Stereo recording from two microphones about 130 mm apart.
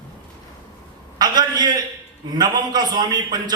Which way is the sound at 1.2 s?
30° right (ahead or behind).